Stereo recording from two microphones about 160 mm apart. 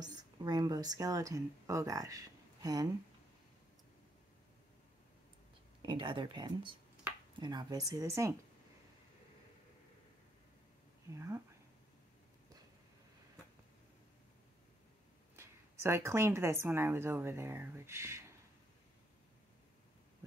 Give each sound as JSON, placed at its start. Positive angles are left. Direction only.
{"t": 0.0, "sound": "speech", "side_deg": -25}
{"t": 5.8, "sound": "a woman's voice", "side_deg": -30}
{"t": 11.1, "sound": "a woman's voice", "side_deg": -15}
{"t": 15.3, "sound": "a woman's voice", "side_deg": -15}